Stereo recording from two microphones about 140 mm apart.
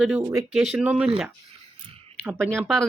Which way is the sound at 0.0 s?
10° right (ahead or behind).